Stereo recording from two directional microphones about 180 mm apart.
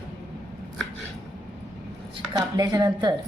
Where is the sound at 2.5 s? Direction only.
20° right (ahead or behind).